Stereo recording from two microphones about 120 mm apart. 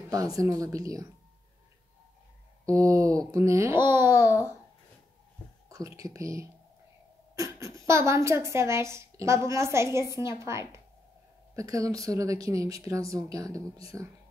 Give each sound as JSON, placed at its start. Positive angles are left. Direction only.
{"t": 0.1, "sound": "speech", "side_deg": -30}
{"t": 2.6, "sound": "speech", "side_deg": -25}
{"t": 5.7, "sound": "speech", "side_deg": -25}